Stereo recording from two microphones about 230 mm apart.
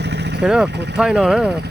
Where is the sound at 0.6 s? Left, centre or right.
Right.